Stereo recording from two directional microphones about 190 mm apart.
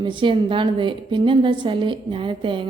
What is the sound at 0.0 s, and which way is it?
A woman's voice, 25° right (ahead or behind).